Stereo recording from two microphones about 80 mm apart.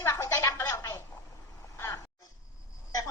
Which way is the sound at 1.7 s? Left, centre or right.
Left.